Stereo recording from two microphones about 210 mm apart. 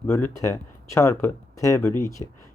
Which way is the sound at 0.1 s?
15° left (ahead or behind).